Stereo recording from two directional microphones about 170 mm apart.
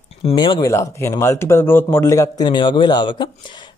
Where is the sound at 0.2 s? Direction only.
30° left (ahead or behind).